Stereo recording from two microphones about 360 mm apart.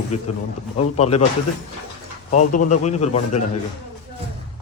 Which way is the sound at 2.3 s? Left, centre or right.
Left.